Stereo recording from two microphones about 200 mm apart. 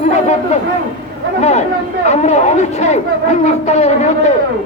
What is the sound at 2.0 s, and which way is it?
A man's voice, 35° left (ahead or behind).